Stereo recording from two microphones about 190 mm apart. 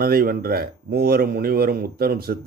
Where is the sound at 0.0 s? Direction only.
50° right (ahead or behind).